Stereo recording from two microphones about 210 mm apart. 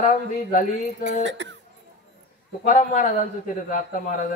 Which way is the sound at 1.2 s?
60° right (ahead or behind).